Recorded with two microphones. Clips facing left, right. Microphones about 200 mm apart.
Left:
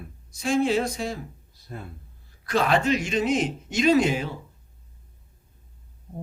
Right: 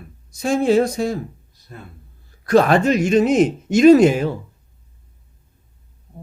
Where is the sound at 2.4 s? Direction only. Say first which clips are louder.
Right 8 dB; 45° right (ahead or behind).